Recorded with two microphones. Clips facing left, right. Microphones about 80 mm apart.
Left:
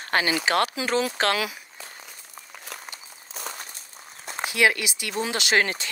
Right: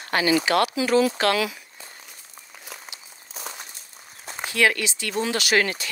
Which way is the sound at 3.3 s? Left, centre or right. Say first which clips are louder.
Left 1 dB; centre.